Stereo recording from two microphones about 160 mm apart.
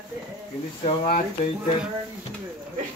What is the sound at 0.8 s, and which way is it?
Speech, 45° left (ahead or behind).